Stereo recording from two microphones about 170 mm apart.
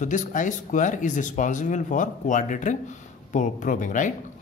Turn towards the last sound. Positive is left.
turn(degrees=50)  # may be behind; listen again after turning